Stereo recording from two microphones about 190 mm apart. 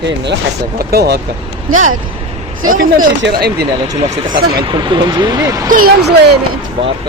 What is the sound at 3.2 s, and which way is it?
Speech, 60° right (ahead or behind).